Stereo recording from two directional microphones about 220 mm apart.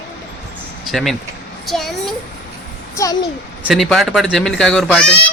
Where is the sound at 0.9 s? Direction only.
Centre (ahead or behind).